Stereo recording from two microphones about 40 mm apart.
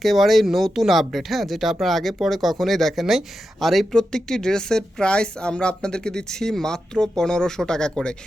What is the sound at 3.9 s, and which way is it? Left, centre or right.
A woman's voice, centre.